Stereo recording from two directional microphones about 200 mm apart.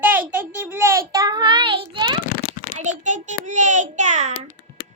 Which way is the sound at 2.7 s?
35° right (ahead or behind).